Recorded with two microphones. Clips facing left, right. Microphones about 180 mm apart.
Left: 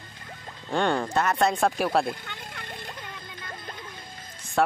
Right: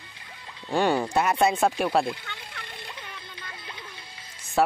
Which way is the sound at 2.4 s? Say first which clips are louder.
Left 2 dB; 50° left (ahead or behind).